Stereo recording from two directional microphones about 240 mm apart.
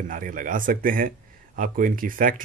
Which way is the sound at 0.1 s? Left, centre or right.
Right.